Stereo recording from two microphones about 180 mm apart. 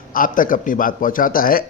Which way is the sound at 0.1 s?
50° left (ahead or behind).